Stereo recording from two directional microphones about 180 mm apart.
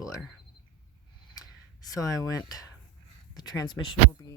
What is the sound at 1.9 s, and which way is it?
Speech, 20° left (ahead or behind).